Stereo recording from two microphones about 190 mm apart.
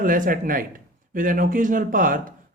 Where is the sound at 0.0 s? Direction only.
45° right (ahead or behind).